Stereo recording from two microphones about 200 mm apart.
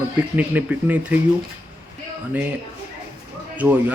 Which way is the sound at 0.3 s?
10° right (ahead or behind).